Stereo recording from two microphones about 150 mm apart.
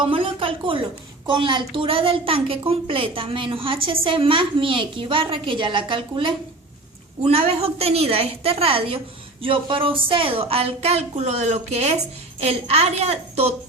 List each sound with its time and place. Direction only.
0.0 s a woman's voice: 35° right (ahead or behind)